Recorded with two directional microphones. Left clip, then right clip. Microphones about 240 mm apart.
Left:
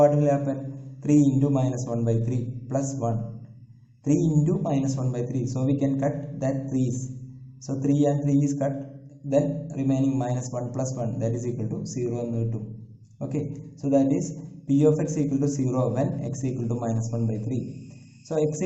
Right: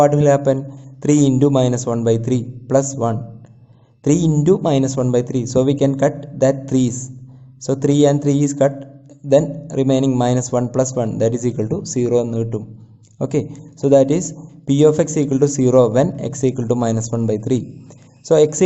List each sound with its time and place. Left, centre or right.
0.0 s a man's voice: right